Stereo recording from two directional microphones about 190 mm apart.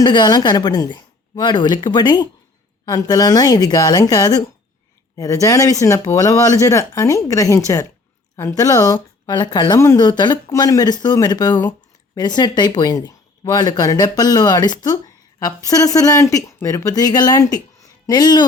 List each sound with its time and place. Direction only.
0.0 s speech: 25° left (ahead or behind)